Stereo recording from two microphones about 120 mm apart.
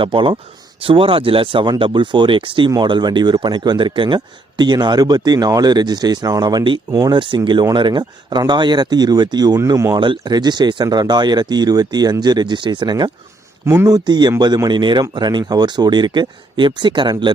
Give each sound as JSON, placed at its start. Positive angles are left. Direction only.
{"t": 0.0, "sound": "speech", "side_deg": -45}